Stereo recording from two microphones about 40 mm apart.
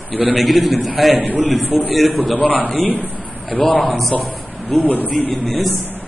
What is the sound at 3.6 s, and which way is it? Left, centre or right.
Speech, centre.